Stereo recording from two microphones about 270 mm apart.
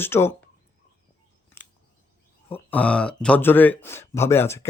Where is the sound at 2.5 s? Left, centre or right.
Centre.